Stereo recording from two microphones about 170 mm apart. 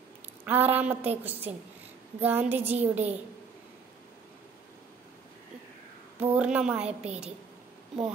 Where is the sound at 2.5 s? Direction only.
40° right (ahead or behind).